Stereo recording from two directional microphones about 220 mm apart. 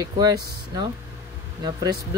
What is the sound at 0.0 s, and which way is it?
Speech, 15° right (ahead or behind).